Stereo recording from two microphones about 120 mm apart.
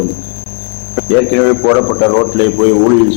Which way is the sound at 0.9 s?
15° left (ahead or behind).